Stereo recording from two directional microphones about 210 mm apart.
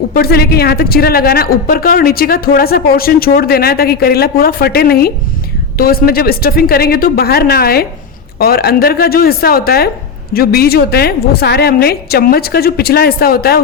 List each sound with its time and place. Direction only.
0.1 s a woman's voice: 45° left (ahead or behind)